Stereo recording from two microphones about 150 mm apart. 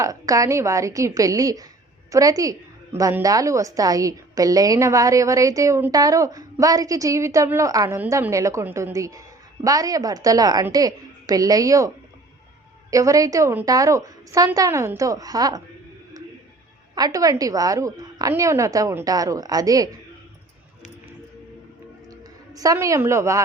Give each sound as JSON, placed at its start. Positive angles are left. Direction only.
{"t": 0.0, "sound": "a woman's voice", "side_deg": -25}
{"t": 12.9, "sound": "a woman's voice", "side_deg": -20}
{"t": 16.9, "sound": "a woman's voice", "side_deg": -25}
{"t": 22.5, "sound": "a woman's voice", "side_deg": -20}